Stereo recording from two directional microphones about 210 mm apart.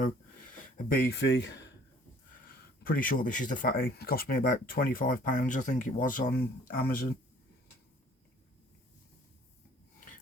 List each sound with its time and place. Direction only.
0.9 s speech: 50° left (ahead or behind)
2.8 s speech: 45° left (ahead or behind)